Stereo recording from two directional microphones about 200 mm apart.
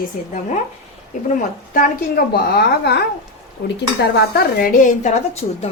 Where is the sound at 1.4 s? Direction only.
40° left (ahead or behind).